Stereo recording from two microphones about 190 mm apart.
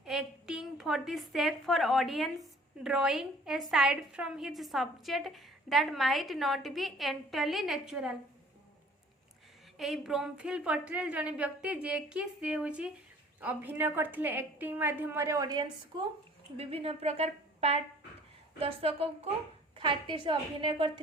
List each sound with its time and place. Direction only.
0.0 s a woman's voice: centre (ahead or behind)
9.7 s a woman's voice: centre (ahead or behind); by 20.9 s 25° right (ahead or behind)